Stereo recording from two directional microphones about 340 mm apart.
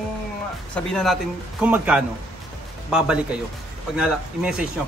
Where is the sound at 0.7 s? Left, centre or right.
Centre.